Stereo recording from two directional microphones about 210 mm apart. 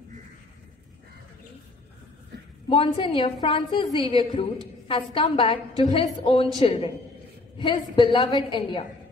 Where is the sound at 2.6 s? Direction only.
25° left (ahead or behind).